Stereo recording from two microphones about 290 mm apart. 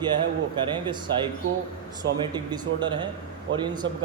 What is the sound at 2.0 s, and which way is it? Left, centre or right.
A man's voice, centre.